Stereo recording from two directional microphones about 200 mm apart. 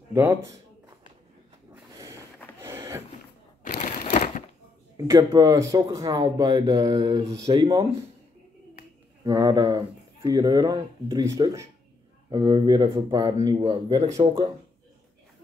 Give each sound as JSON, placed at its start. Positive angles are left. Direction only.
{"t": 0.1, "sound": "speech", "side_deg": -10}
{"t": 1.9, "sound": "a sound", "side_deg": -15}
{"t": 3.6, "sound": "a sound", "side_deg": 40}
{"t": 4.9, "sound": "speech", "side_deg": -15}
{"t": 9.2, "sound": "speech", "side_deg": -20}
{"t": 14.0, "sound": "speech", "side_deg": -35}